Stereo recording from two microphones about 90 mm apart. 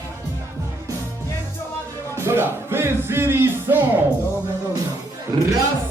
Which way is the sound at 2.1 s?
25° right (ahead or behind).